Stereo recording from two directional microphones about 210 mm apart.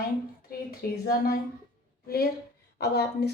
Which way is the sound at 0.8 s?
45° left (ahead or behind).